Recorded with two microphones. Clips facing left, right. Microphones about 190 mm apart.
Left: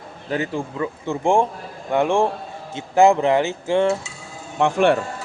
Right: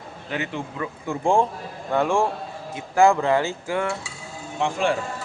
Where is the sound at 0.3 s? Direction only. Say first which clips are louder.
Left 5 dB; 35° left (ahead or behind).